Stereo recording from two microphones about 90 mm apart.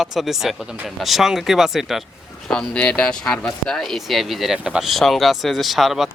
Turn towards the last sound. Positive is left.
turn(degrees=0)  # may be behind; listen again after turning